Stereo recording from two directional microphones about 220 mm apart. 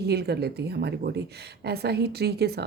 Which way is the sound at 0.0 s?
50° right (ahead or behind).